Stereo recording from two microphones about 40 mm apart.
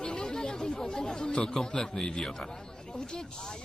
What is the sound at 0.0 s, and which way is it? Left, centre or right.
Speech, centre.